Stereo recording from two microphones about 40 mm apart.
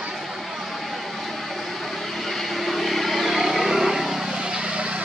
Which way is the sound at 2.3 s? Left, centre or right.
Centre.